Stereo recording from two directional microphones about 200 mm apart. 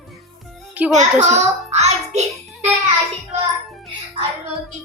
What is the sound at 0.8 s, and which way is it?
Speech, 10° right (ahead or behind).